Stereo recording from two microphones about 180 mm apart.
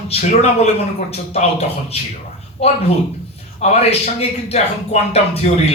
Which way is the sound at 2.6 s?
35° left (ahead or behind).